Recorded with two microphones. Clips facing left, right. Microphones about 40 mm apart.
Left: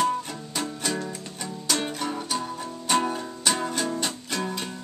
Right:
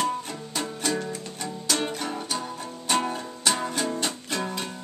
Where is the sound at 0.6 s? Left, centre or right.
Centre.